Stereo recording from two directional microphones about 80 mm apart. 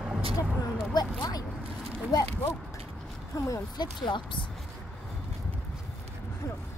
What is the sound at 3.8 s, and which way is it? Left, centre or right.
Speech, left.